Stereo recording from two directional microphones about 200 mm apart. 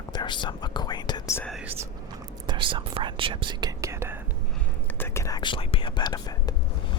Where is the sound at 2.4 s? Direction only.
25° right (ahead or behind).